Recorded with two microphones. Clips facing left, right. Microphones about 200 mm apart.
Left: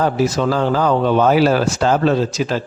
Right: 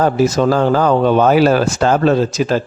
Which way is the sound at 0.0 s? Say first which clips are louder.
Right 3 dB; 45° right (ahead or behind).